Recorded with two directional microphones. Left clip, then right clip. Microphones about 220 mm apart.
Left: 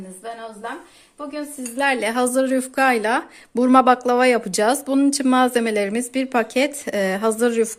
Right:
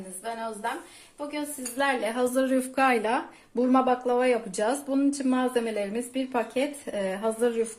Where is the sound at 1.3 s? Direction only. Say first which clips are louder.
Left 5 dB; 50° left (ahead or behind).